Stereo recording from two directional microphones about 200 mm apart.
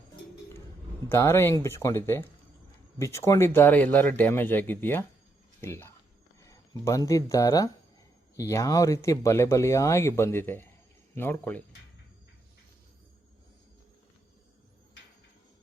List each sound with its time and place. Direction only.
1.1 s speech: 10° left (ahead or behind)